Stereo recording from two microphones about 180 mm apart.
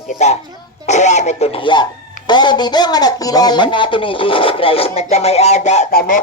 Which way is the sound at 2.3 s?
25° left (ahead or behind).